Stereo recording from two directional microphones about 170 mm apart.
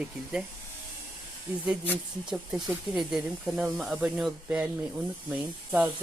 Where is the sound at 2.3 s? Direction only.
Centre (ahead or behind).